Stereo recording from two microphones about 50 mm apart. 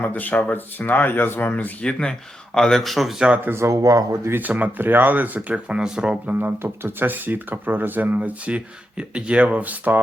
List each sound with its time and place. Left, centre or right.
0.0 s speech: left
1.8 s speech: centre
2.8 s speech: centre
3.4 s speech: right
3.7 s speech: right
4.4 s speech: right
4.8 s speech: right
5.8 s speech: centre
6.2 s speech: right